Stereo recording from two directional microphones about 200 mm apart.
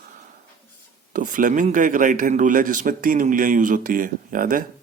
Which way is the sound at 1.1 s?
40° right (ahead or behind).